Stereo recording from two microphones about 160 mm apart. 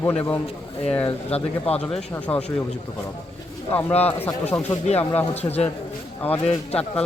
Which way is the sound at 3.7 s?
10° left (ahead or behind).